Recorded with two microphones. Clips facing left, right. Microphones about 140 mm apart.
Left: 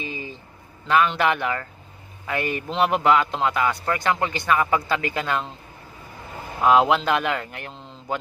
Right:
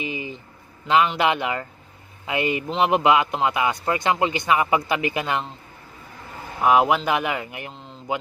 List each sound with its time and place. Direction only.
0.0 s a sound: 15° right (ahead or behind)
0.8 s speech: 15° right (ahead or behind)
6.6 s speech: 5° right (ahead or behind)